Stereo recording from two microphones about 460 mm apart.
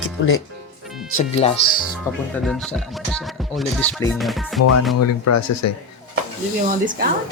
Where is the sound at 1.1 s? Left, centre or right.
Centre.